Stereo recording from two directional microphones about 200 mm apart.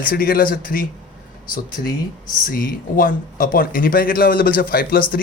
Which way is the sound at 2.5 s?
45° left (ahead or behind).